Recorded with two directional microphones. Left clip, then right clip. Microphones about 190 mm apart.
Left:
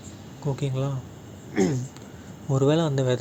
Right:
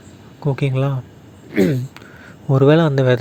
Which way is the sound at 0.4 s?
30° right (ahead or behind).